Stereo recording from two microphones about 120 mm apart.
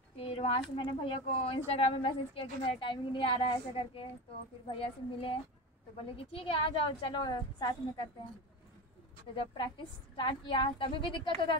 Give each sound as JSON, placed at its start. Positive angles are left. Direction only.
{"t": 0.2, "sound": "a woman's voice", "side_deg": 50}
{"t": 9.3, "sound": "a woman's voice", "side_deg": 45}